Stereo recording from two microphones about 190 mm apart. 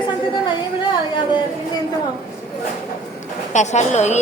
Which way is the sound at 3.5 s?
40° left (ahead or behind).